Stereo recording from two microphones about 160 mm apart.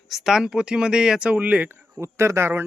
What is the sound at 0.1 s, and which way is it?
Speech, centre (ahead or behind).